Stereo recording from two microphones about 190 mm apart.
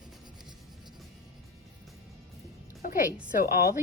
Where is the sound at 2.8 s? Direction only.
50° left (ahead or behind).